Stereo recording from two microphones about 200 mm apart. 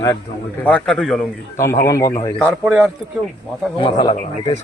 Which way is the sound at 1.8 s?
15° left (ahead or behind).